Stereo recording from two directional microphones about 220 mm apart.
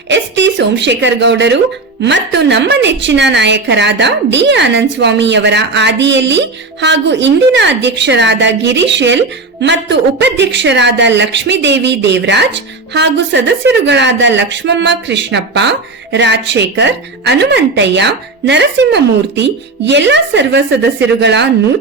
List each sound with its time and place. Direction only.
0.1 s a woman's voice: 55° right (ahead or behind)